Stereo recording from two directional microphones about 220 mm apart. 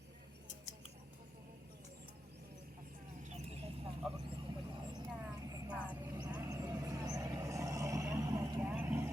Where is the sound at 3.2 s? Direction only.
30° right (ahead or behind).